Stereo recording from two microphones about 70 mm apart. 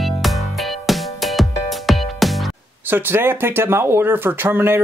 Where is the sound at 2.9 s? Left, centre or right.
Right.